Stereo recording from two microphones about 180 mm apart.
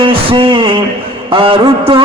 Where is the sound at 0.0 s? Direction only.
30° right (ahead or behind).